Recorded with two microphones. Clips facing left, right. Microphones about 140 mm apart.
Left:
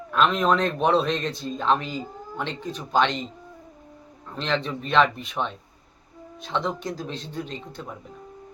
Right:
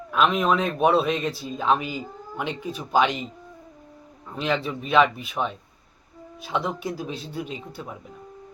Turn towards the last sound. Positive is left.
turn(degrees=-5)  # may be behind; listen again after turning